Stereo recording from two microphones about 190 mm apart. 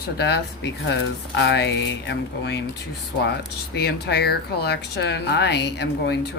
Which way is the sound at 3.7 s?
60° left (ahead or behind).